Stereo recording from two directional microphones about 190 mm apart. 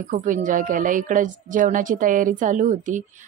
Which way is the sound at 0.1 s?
40° right (ahead or behind).